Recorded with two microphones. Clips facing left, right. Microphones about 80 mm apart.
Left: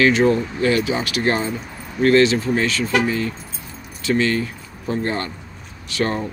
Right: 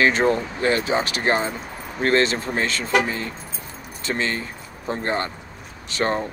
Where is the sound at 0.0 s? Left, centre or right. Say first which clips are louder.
Left 3 dB; right.